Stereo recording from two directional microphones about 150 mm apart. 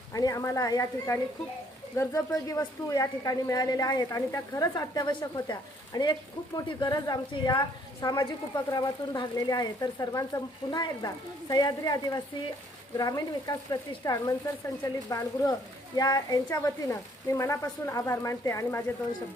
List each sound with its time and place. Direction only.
0.1 s a woman's voice: 25° left (ahead or behind)